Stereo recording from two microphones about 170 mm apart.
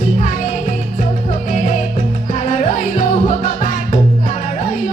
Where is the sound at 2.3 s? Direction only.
45° left (ahead or behind).